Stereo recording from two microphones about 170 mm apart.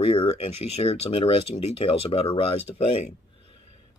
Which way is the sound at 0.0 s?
35° left (ahead or behind).